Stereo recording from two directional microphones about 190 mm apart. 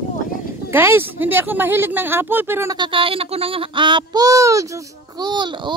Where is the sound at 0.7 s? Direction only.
10° right (ahead or behind).